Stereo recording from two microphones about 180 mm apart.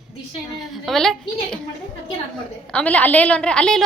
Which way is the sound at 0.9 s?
5° left (ahead or behind).